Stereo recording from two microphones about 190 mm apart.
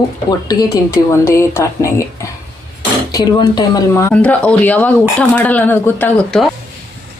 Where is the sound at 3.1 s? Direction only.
20° left (ahead or behind).